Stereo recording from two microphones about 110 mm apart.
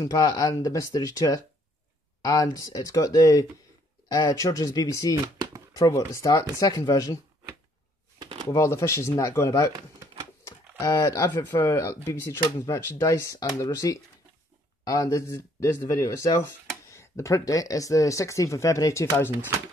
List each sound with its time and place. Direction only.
0.0 s speech: 40° left (ahead or behind)
5.1 s speech: 35° right (ahead or behind)
5.7 s speech: 30° left (ahead or behind)
8.2 s shuffling cards: 45° right (ahead or behind)
8.5 s speech: 30° left (ahead or behind)